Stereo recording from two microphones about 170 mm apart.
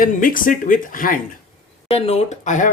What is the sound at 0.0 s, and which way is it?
Speech, 55° left (ahead or behind).